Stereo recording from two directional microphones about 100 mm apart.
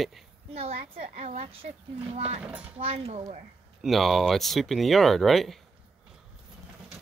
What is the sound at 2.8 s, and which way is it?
Speech, 75° right (ahead or behind).